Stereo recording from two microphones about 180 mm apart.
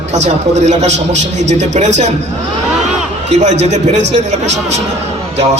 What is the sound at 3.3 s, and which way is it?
A man's voice, 40° right (ahead or behind).